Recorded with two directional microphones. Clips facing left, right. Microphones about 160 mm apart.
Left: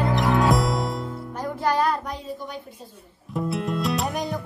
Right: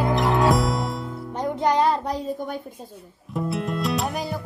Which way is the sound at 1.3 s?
20° right (ahead or behind).